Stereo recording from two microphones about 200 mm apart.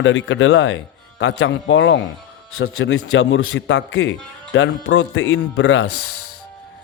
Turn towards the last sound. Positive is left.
turn(degrees=70)  # may be behind; listen again after turning